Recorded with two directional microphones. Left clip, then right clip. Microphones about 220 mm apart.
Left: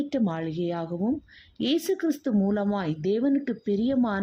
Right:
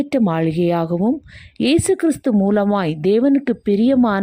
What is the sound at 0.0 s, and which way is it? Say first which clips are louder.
A woman's voice: right 10 dB; 35° right (ahead or behind).